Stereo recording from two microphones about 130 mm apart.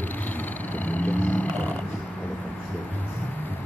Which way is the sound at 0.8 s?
15° left (ahead or behind).